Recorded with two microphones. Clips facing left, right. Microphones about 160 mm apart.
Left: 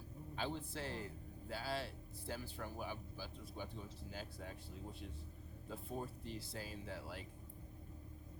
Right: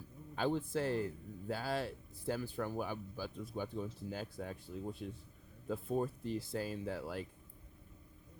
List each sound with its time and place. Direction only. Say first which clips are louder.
0.3 s speech: right 9 dB; 50° right (ahead or behind)
5.6 s speech: right 10 dB; 55° right (ahead or behind)